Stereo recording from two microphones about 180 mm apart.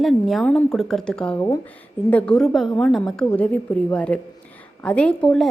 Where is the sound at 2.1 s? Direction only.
5° left (ahead or behind).